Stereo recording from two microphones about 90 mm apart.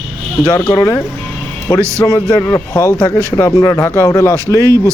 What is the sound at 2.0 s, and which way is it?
Speech, 30° left (ahead or behind).